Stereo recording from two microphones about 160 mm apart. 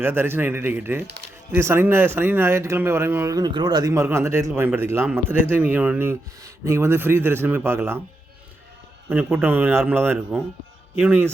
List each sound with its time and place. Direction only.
0.0 s speech: 15° right (ahead or behind)
9.0 s speech: 10° right (ahead or behind)